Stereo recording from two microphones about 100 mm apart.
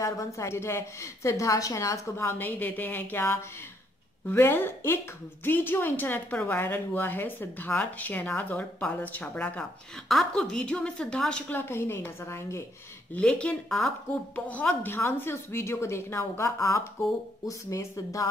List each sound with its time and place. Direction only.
0.0 s a woman's voice: 30° left (ahead or behind)
10.0 s a woman's voice: 5° left (ahead or behind); by 12.6 s 25° left (ahead or behind)
13.1 s a woman's voice: 10° left (ahead or behind)
14.3 s a woman's voice: 20° left (ahead or behind)